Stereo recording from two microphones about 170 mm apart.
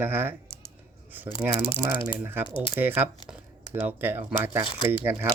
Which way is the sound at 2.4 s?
30° left (ahead or behind).